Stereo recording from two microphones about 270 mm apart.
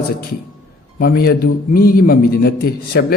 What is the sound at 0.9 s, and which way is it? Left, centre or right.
A man's voice, left.